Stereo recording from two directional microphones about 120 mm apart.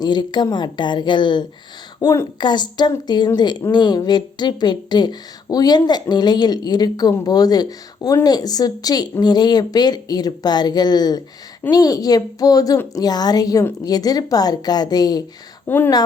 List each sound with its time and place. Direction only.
0.0 s speech: 35° left (ahead or behind)
15.6 s speech: 15° left (ahead or behind)